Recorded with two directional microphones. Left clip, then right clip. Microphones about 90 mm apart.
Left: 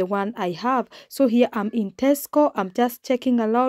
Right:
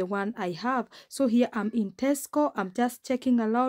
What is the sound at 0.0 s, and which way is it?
Speech, 30° left (ahead or behind).